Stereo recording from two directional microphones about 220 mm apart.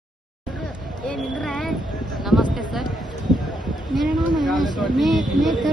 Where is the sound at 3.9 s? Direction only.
Centre (ahead or behind).